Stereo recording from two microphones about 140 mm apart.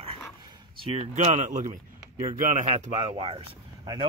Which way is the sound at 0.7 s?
40° right (ahead or behind).